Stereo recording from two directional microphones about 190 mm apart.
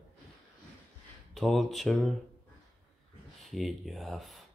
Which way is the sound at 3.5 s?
Centre (ahead or behind).